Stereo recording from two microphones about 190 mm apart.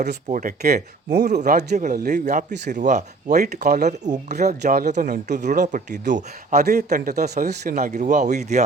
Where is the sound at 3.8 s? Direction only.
40° right (ahead or behind).